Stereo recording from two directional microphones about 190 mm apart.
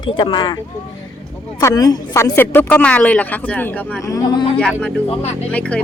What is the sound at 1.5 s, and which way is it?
Speech, 20° left (ahead or behind).